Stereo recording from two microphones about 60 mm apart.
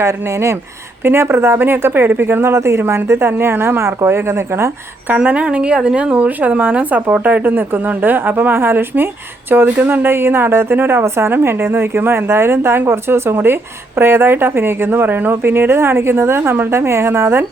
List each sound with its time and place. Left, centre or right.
0.0 s speech: right
5.1 s a woman's voice: right